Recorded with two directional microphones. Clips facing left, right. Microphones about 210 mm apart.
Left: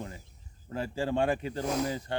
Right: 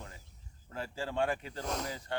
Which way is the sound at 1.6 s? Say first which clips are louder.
Left 9 dB; 5° left (ahead or behind).